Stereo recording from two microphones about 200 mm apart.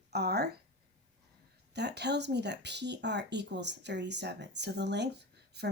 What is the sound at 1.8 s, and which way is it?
A woman's voice, 55° right (ahead or behind).